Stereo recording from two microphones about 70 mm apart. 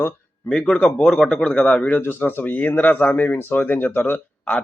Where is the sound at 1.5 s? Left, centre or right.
Centre.